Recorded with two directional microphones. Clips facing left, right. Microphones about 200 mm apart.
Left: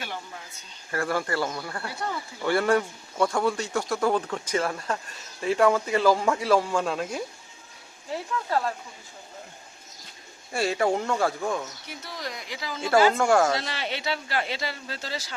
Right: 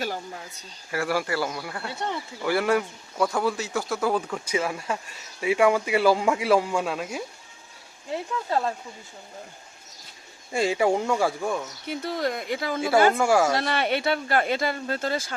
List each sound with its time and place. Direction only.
0.0 s a sound: 40° right (ahead or behind)
0.9 s a man's voice: 5° right (ahead or behind)
1.9 s speech: 25° right (ahead or behind)
2.4 s a man's voice: 5° right (ahead or behind)
8.4 s speech: 25° right (ahead or behind)
10.5 s a man's voice: 15° right (ahead or behind)
11.9 s speech: 55° right (ahead or behind)
13.1 s a man's voice: 10° right (ahead or behind)
13.6 s speech: 60° right (ahead or behind)